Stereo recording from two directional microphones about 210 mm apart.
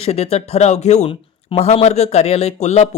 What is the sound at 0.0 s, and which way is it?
Speech, 30° left (ahead or behind).